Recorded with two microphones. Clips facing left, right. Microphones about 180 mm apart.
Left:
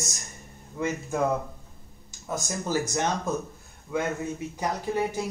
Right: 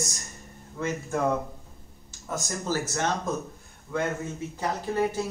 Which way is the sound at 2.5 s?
15° left (ahead or behind).